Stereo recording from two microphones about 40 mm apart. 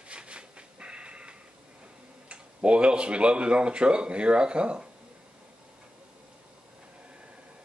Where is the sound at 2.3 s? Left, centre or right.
Right.